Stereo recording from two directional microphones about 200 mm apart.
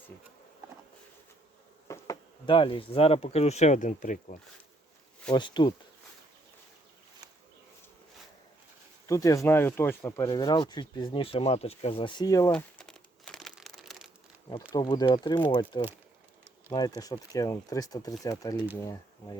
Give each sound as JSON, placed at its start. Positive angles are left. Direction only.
{"t": 1.9, "sound": "speech", "side_deg": 20}
{"t": 5.3, "sound": "speech", "side_deg": 25}
{"t": 9.0, "sound": "speech", "side_deg": 15}
{"t": 12.5, "sound": "crumpling", "side_deg": 5}
{"t": 14.7, "sound": "speech", "side_deg": 20}